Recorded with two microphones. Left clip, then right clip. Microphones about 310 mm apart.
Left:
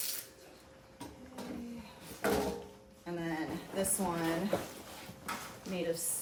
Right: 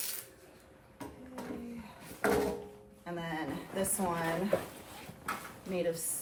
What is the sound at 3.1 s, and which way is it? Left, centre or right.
A woman's voice, centre.